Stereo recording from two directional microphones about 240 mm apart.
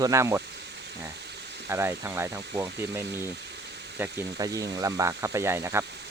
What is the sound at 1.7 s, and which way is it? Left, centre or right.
Speech, centre.